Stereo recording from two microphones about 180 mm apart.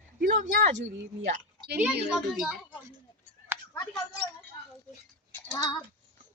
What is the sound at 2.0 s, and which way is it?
Speech, centre (ahead or behind).